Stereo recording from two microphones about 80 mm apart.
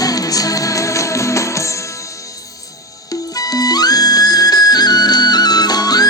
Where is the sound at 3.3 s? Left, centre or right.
Left.